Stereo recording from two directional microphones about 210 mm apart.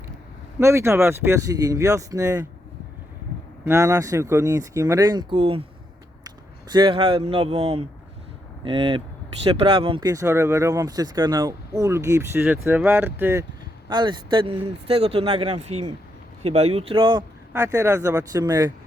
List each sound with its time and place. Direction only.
0.6 s speech: 15° right (ahead or behind)
3.7 s speech: 15° right (ahead or behind)
13.9 s speech: 20° right (ahead or behind)